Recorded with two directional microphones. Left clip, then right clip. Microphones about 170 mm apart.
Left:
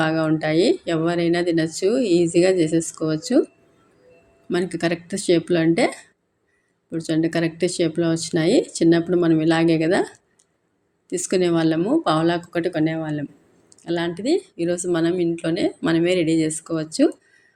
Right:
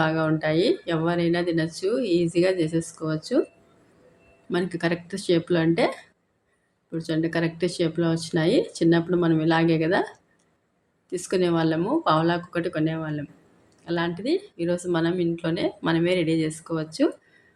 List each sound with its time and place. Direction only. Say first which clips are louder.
0.0 s speech: left 3 dB; 15° left (ahead or behind)
4.4 s speech: left 3 dB; 15° left (ahead or behind)